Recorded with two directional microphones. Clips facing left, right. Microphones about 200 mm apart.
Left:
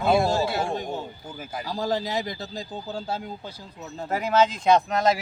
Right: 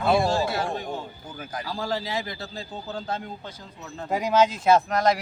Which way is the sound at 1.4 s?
5° left (ahead or behind).